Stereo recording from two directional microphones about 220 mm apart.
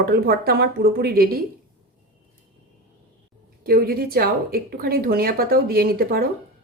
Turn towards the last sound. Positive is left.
turn(degrees=-40)  # may be behind; listen again after turning